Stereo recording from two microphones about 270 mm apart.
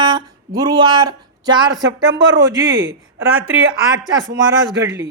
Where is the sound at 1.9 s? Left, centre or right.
Right.